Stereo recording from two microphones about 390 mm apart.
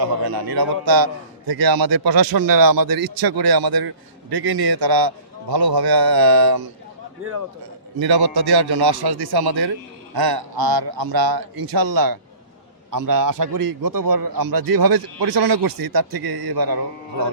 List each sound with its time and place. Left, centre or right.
0.3 s a man's voice: right
7.9 s a man's voice: right